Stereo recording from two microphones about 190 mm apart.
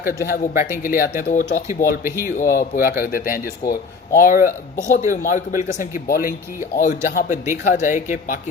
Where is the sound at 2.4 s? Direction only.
45° left (ahead or behind).